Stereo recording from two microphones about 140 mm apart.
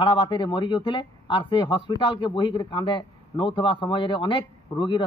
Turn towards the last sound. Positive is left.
turn(degrees=35)  # may be behind; listen again after turning